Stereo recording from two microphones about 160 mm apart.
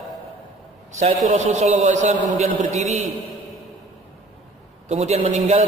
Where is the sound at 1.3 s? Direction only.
45° right (ahead or behind).